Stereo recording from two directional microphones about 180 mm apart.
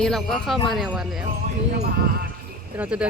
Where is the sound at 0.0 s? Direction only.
Centre (ahead or behind).